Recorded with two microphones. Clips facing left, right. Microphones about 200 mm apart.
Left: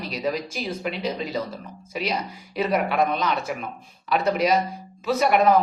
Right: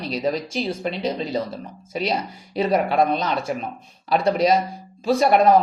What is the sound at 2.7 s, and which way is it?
Speech, 30° right (ahead or behind).